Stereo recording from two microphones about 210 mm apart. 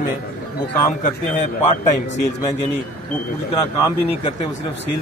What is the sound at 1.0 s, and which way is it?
Speech, 35° left (ahead or behind).